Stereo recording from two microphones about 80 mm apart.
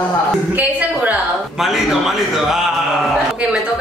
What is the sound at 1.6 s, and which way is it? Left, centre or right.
A man's voice, centre.